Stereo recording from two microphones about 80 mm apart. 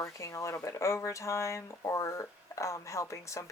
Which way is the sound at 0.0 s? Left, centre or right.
Left.